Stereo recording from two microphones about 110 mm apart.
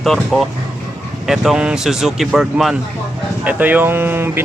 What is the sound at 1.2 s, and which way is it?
Speech, 5° right (ahead or behind).